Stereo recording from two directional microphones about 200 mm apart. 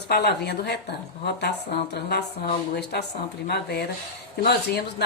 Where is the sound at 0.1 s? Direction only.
55° left (ahead or behind).